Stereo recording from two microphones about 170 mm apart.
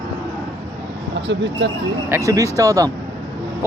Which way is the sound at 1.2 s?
90° right.